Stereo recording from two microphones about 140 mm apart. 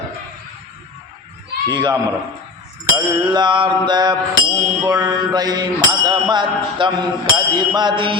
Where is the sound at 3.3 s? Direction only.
35° right (ahead or behind).